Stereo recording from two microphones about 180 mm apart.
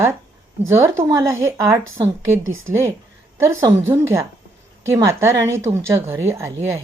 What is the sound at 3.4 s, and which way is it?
A woman's voice, 15° right (ahead or behind).